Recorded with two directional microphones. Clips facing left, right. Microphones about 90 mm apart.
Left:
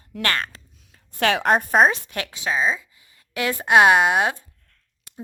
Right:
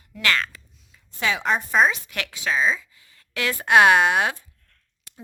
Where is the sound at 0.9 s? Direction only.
65° left (ahead or behind).